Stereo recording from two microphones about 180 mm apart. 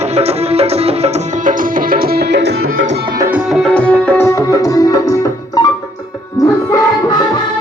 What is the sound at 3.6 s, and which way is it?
Music, 5° left (ahead or behind).